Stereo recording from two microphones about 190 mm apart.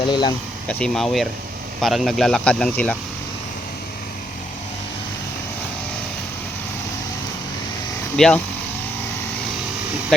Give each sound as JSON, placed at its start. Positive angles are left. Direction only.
{"t": 0.0, "sound": "speech", "side_deg": 25}
{"t": 0.7, "sound": "speech", "side_deg": 5}
{"t": 8.1, "sound": "speech", "side_deg": 5}
{"t": 10.1, "sound": "speech", "side_deg": 0}